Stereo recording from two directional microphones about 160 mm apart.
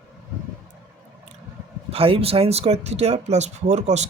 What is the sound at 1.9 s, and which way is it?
Speech, 35° right (ahead or behind).